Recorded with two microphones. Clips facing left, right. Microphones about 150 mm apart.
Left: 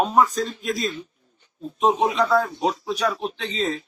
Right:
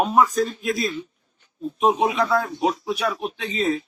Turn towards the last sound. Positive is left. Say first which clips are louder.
# right 3 dB
turn(degrees=-10)  # may be behind; listen again after turning